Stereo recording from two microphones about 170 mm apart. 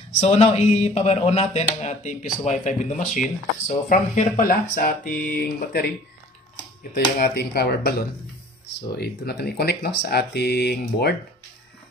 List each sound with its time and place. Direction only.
0.2 s speech: 35° left (ahead or behind); by 5.1 s 55° left (ahead or behind)
5.3 s speech: 70° left (ahead or behind)
6.9 s speech: 65° left (ahead or behind)
8.9 s speech: 65° left (ahead or behind)